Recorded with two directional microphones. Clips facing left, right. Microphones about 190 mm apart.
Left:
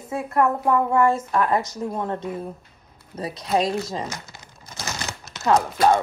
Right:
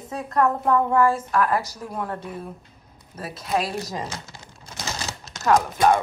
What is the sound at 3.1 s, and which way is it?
Speech, 30° left (ahead or behind).